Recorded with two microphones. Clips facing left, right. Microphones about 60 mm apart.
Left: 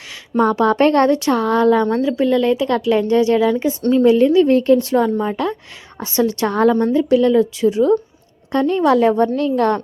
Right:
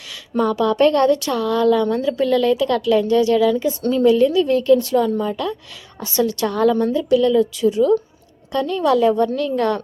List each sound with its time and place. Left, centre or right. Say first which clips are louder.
0.3 s a woman's voice: left 2 dB; left
2.0 s a woman's voice: left 2 dB; left